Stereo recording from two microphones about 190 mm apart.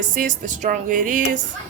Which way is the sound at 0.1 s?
45° right (ahead or behind).